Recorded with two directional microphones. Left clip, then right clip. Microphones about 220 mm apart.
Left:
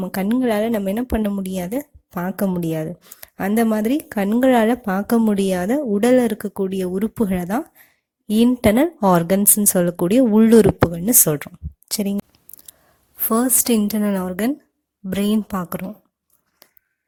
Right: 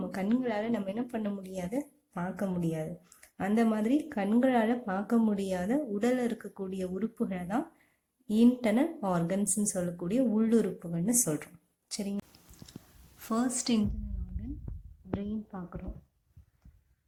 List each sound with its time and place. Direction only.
0.0 s speech: 40° left (ahead or behind)
13.1 s a woman's voice: 40° left (ahead or behind)
15.2 s a woman's voice: 50° left (ahead or behind)